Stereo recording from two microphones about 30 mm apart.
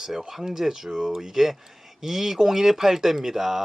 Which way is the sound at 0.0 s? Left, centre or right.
Centre.